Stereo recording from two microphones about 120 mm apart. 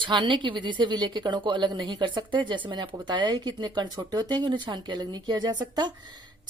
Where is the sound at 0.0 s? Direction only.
40° right (ahead or behind).